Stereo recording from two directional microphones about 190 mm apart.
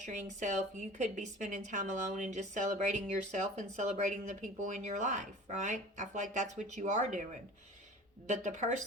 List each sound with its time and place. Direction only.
0.0 s a woman's voice: 40° right (ahead or behind)
8.3 s a woman's voice: 40° right (ahead or behind)